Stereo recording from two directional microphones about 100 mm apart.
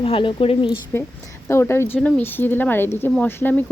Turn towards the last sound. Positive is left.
turn(degrees=20)  # may be behind; listen again after turning